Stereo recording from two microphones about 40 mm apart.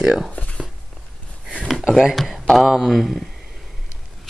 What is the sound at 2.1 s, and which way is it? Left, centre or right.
Speech, centre.